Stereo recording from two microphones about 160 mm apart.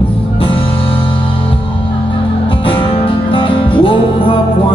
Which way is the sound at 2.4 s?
35° left (ahead or behind).